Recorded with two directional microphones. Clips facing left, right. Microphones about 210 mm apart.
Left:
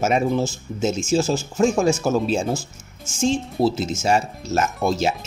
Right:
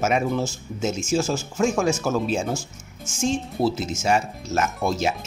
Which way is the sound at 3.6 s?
30° left (ahead or behind).